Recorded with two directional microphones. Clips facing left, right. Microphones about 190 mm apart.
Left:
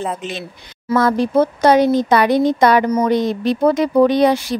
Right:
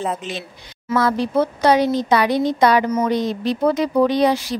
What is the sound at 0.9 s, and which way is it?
Speech, 50° left (ahead or behind).